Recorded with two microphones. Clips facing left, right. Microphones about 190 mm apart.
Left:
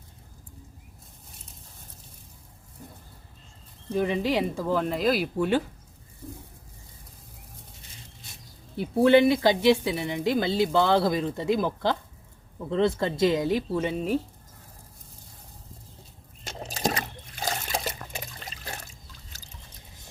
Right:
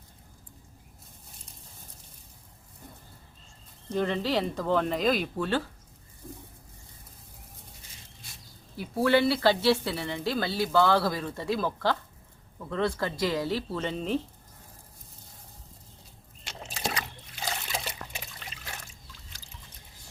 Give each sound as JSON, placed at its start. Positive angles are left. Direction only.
{"t": 3.9, "sound": "speech", "side_deg": 10}
{"t": 8.7, "sound": "speech", "side_deg": 25}
{"t": 16.4, "sound": "trickle", "side_deg": 40}